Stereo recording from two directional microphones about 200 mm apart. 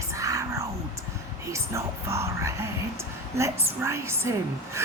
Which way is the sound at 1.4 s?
15° right (ahead or behind).